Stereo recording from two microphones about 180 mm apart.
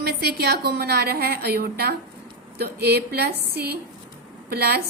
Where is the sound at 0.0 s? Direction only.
60° right (ahead or behind).